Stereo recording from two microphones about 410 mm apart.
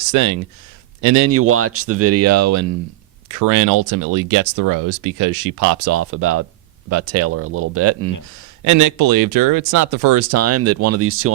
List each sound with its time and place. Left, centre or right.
0.1 s speech: right
8.6 s speech: right